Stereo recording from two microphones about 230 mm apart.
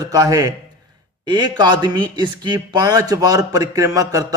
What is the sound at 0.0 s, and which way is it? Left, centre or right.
A man's voice, centre.